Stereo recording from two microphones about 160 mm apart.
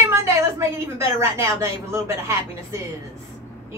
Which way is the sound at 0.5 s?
15° right (ahead or behind).